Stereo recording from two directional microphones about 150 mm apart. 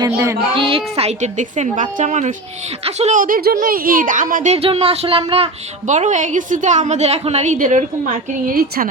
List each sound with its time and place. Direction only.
0.0 s speech: 20° right (ahead or behind)
0.5 s a woman's voice: 35° right (ahead or behind); by 4.5 s 65° right (ahead or behind)
4.5 s speech: 40° right (ahead or behind)
5.8 s a woman's voice: 55° right (ahead or behind)
8.5 s speech: 80° right